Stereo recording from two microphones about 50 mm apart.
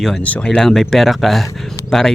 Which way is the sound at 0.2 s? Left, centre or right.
Left.